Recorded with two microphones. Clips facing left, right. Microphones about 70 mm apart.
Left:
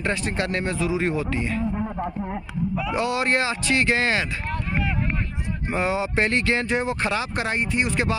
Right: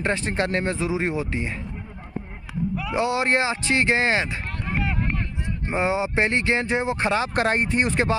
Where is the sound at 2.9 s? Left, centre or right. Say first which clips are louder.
Right 2 dB; right.